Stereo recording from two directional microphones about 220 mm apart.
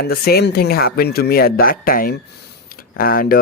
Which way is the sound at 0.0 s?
45° left (ahead or behind).